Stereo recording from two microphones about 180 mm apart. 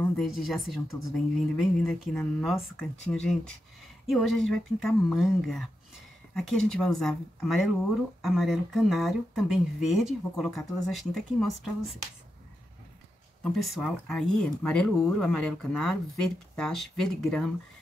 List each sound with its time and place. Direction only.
0.2 s speech: centre (ahead or behind)
13.4 s speech: 5° left (ahead or behind)